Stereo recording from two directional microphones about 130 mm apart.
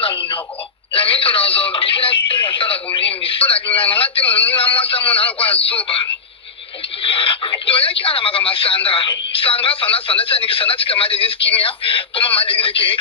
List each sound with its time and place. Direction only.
0.0 s a sound: 40° left (ahead or behind)
2.5 s radio: 45° left (ahead or behind)
3.8 s speech: 45° left (ahead or behind)
4.3 s a man's voice: 15° left (ahead or behind)
4.5 s a sound: 45° left (ahead or behind)
7.0 s speech: 45° left (ahead or behind)